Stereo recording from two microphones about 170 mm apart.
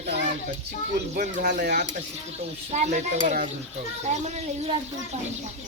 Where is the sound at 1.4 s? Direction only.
55° right (ahead or behind).